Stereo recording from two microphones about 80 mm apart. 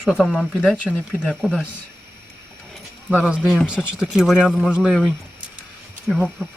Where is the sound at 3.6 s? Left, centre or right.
Centre.